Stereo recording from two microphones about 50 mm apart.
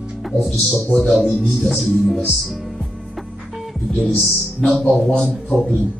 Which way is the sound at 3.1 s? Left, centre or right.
Centre.